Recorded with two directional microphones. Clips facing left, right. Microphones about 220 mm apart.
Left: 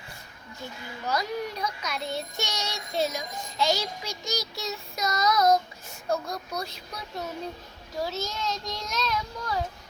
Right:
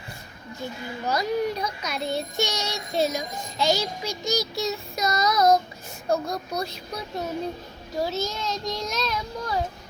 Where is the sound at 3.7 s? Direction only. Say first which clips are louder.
Right 4 dB; 5° right (ahead or behind).